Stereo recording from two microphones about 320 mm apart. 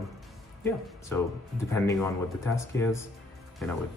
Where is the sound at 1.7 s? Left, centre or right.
Centre.